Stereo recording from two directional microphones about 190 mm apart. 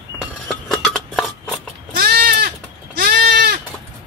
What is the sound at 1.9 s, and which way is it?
Goat, 50° right (ahead or behind).